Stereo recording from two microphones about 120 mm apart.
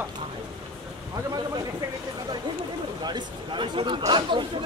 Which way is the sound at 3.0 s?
40° right (ahead or behind).